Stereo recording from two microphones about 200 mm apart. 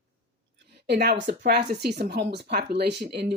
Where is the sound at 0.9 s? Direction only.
55° right (ahead or behind).